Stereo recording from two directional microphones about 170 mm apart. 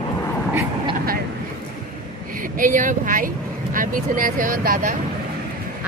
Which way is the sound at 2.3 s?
55° right (ahead or behind).